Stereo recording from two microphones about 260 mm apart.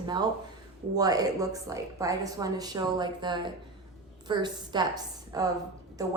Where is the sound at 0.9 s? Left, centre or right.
Centre.